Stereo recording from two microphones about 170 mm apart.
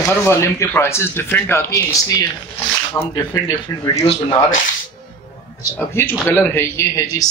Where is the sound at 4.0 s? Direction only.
35° left (ahead or behind).